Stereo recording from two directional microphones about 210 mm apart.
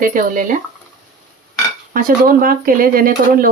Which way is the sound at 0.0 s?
40° right (ahead or behind).